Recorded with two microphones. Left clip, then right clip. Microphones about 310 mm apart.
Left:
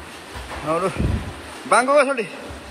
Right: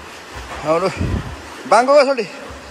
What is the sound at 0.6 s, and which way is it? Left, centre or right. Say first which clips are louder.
A man's voice: right 5 dB; centre.